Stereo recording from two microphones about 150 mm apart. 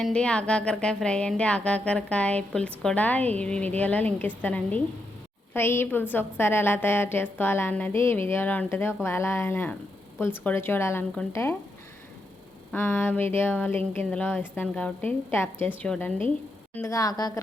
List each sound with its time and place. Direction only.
0.0 s a woman's voice: 5° left (ahead or behind)
12.7 s a woman's voice: 15° left (ahead or behind)
16.7 s a woman's voice: 20° left (ahead or behind)